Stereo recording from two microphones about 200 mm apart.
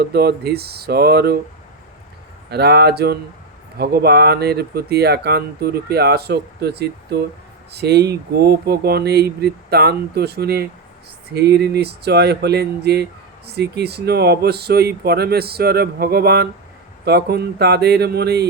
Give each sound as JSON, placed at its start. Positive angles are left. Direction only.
{"t": 0.0, "sound": "speech", "side_deg": -55}
{"t": 2.5, "sound": "speech", "side_deg": -55}